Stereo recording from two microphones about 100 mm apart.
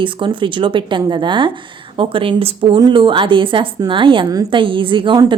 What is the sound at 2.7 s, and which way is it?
Speech, 45° right (ahead or behind).